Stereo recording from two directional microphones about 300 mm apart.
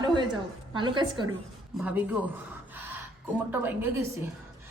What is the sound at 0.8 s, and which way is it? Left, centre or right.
Speech, centre.